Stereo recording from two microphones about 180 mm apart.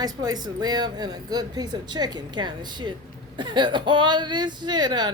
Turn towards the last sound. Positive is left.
turn(degrees=-25)  # may be behind; listen again after turning